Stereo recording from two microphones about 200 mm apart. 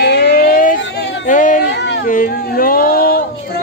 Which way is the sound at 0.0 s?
55° left (ahead or behind).